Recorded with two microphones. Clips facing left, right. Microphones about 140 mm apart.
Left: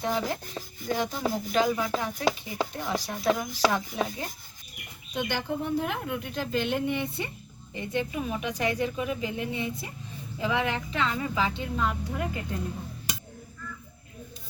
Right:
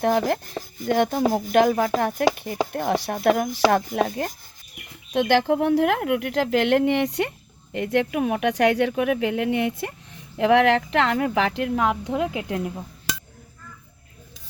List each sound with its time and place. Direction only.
0.0 s speech: 60° right (ahead or behind)
5.1 s a woman's voice: 90° right